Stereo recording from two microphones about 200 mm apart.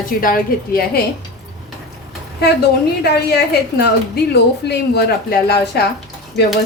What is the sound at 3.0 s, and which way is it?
A woman's voice, 55° left (ahead or behind).